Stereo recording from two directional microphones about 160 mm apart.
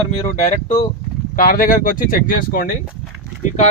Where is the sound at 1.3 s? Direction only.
60° left (ahead or behind).